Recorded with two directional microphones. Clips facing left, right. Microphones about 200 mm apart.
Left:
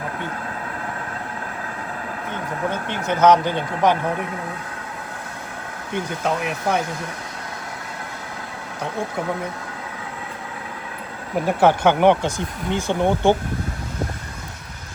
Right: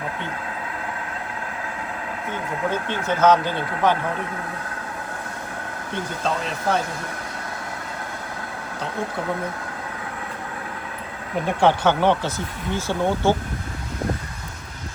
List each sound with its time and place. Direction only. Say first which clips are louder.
2.8 s speech: left 2 dB; 15° left (ahead or behind)
5.9 s speech: left 3 dB; 15° left (ahead or behind)
11.3 s speech: left 2 dB; 5° left (ahead or behind)